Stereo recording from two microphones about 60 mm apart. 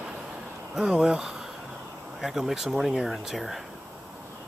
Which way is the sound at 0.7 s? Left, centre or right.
Centre.